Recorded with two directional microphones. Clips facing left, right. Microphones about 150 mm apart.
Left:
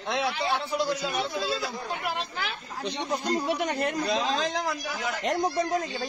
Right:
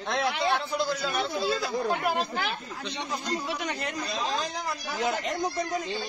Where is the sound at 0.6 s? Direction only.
10° left (ahead or behind).